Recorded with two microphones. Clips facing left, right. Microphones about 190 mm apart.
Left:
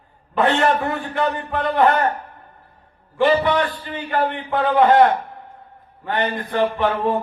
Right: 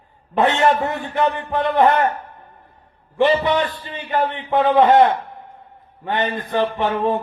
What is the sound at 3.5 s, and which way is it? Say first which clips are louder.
A man's voice: even; 20° right (ahead or behind).